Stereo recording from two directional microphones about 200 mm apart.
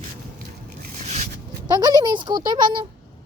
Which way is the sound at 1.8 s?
20° right (ahead or behind).